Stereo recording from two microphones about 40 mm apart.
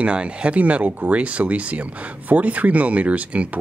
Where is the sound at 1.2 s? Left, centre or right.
Right.